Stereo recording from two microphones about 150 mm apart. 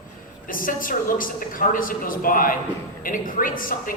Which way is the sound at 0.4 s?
65° left (ahead or behind).